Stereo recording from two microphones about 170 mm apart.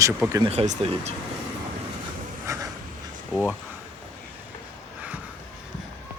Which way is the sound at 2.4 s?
20° right (ahead or behind).